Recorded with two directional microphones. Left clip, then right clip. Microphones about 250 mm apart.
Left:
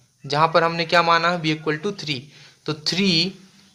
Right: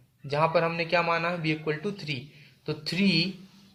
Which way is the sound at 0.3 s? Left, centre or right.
Left.